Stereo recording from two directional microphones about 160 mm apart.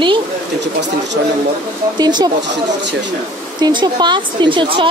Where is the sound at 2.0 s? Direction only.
25° right (ahead or behind).